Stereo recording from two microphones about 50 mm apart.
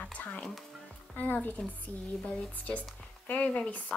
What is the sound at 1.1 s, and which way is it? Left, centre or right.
A woman's voice, left.